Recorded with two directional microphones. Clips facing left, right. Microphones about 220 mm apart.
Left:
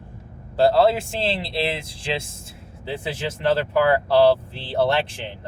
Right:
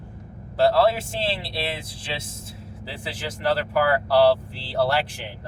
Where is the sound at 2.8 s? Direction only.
25° left (ahead or behind).